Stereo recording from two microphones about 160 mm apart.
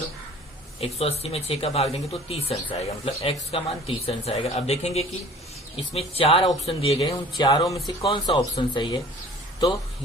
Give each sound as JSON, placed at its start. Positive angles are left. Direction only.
{"t": 0.8, "sound": "speech", "side_deg": 40}
{"t": 7.1, "sound": "speech", "side_deg": 30}
{"t": 7.9, "sound": "speech", "side_deg": 35}